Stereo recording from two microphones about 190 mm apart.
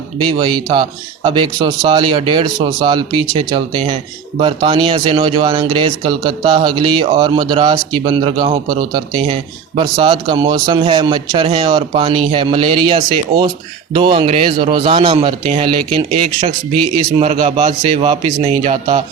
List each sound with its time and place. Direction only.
0.3 s a man's voice: 25° right (ahead or behind)
17.2 s a man's voice: 35° right (ahead or behind)